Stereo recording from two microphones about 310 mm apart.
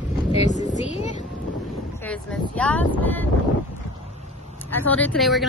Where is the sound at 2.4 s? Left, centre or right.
Centre.